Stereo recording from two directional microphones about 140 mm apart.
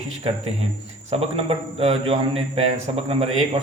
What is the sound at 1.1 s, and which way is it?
A man's voice, 45° right (ahead or behind).